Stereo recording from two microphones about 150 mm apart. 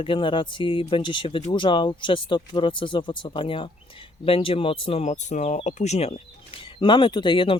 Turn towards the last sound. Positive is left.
turn(degrees=35)  # may be behind; listen again after turning